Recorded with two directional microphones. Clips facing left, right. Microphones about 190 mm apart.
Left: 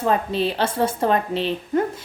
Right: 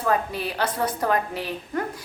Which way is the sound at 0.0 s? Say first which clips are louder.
Left 4 dB; 25° left (ahead or behind).